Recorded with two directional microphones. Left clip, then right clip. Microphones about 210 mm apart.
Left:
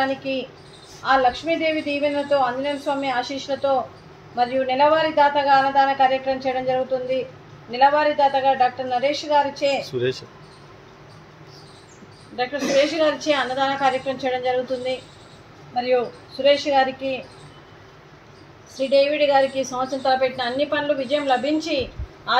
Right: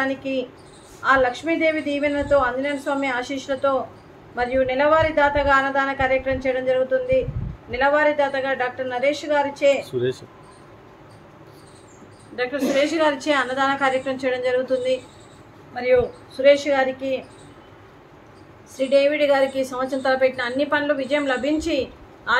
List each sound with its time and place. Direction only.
0.1 s a woman's voice: 10° right (ahead or behind)
4.4 s a woman's voice: 15° right (ahead or behind)
12.4 s a woman's voice: 15° right (ahead or behind)
19.0 s a woman's voice: 15° right (ahead or behind)